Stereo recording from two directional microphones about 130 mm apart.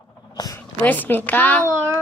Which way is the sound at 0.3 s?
30° left (ahead or behind).